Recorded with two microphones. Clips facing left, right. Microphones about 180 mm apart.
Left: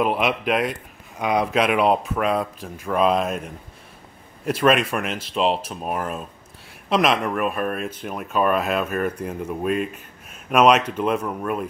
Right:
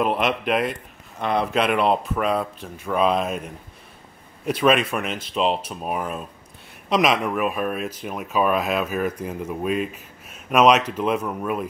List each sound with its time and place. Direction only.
0.0 s speech: centre (ahead or behind)